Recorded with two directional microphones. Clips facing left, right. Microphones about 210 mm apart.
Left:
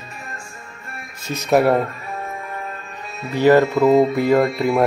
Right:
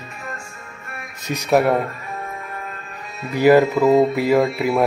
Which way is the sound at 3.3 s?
10° right (ahead or behind).